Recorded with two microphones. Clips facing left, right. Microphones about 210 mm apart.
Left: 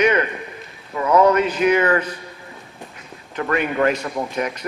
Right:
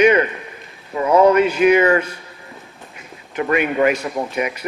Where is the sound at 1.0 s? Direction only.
30° right (ahead or behind).